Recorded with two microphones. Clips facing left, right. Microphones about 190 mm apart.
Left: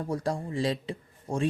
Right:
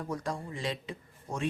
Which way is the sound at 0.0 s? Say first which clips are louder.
Left 5 dB; 30° left (ahead or behind).